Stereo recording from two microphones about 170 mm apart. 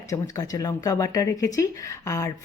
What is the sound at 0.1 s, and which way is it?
Speech, 20° left (ahead or behind).